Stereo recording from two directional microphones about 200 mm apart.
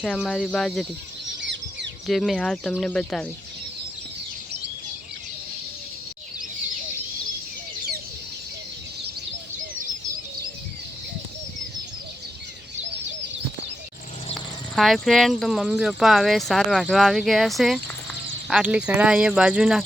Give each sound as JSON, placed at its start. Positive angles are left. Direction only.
{"t": 0.0, "sound": "speech", "side_deg": 0}
{"t": 1.4, "sound": "chicken", "side_deg": -60}
{"t": 2.0, "sound": "speech", "side_deg": 0}
{"t": 14.3, "sound": "speech", "side_deg": 0}